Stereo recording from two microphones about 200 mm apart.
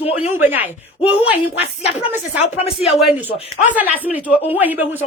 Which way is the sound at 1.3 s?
30° left (ahead or behind).